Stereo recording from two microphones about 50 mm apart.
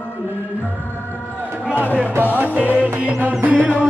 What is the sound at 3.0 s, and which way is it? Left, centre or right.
Music, right.